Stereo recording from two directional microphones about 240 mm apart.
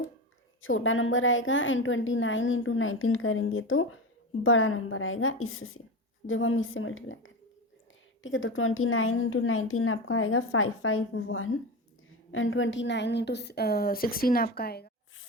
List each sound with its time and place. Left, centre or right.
0.6 s a woman's voice: left